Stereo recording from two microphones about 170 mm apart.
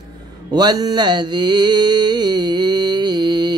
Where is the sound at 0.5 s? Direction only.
25° right (ahead or behind).